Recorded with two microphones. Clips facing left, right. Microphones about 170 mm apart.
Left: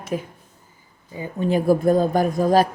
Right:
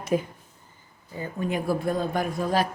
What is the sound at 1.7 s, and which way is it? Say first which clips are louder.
Speech: left 10 dB; 40° left (ahead or behind).